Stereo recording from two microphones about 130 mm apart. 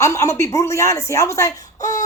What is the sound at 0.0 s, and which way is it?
Speech, 20° left (ahead or behind).